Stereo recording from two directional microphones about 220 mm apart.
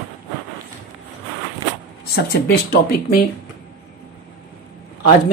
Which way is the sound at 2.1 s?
45° left (ahead or behind).